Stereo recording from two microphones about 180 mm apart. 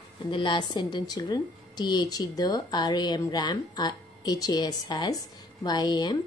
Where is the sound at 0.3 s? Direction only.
25° left (ahead or behind).